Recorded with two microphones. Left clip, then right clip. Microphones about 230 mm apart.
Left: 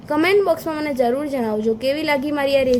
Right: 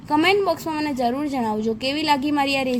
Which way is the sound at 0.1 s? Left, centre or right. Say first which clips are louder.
Left 2 dB; centre.